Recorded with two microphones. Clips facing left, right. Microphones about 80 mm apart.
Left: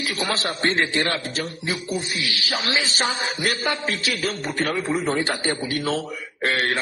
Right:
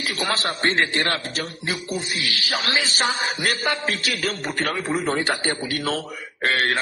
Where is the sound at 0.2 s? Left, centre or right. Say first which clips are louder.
Right 1 dB; right.